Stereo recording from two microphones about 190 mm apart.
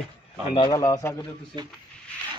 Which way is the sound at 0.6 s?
20° left (ahead or behind).